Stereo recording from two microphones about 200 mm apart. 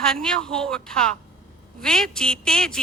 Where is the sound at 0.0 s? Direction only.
5° left (ahead or behind).